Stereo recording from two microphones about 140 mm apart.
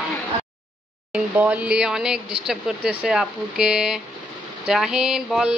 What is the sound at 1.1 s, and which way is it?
Speech, 10° right (ahead or behind).